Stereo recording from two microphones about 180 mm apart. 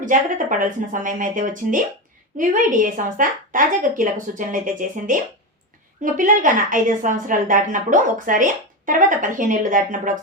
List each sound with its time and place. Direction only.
0.0 s a woman's voice: 45° right (ahead or behind)